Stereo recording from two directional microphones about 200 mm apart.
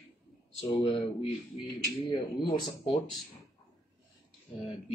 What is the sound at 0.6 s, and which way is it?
Speech, 25° left (ahead or behind).